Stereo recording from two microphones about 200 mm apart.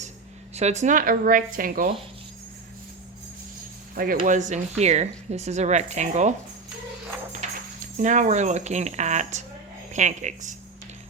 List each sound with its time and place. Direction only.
0.5 s speech: 35° right (ahead or behind)
3.9 s speech: 45° right (ahead or behind)
7.3 s speech: 35° right (ahead or behind)